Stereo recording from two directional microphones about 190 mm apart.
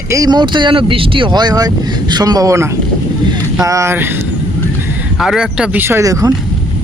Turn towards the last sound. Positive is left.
turn(degrees=-20)  # may be behind; listen again after turning